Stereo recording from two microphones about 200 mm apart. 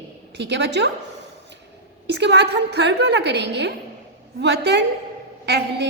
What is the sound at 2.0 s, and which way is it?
A woman's voice, 60° right (ahead or behind).